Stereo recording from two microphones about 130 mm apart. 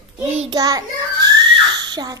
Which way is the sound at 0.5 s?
30° right (ahead or behind).